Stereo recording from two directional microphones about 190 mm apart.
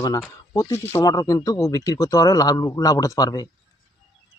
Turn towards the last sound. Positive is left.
turn(degrees=20)  # may be behind; listen again after turning